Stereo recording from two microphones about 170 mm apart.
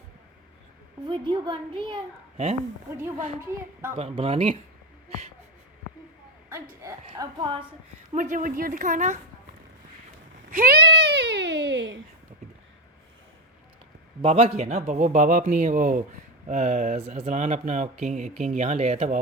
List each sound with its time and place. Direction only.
1.0 s a woman's voice: 30° right (ahead or behind)
3.5 s speech: 15° right (ahead or behind)
3.9 s speech: 35° right (ahead or behind)
7.1 s a woman's voice: 25° right (ahead or behind)
8.1 s speech: 45° right (ahead or behind)
10.5 s a sound: 60° right (ahead or behind); by 11.9 s 90° right
14.2 s speech: 35° right (ahead or behind)